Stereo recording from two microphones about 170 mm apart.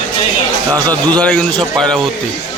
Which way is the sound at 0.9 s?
10° left (ahead or behind).